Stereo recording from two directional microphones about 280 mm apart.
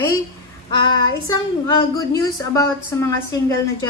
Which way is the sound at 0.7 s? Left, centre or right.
Centre.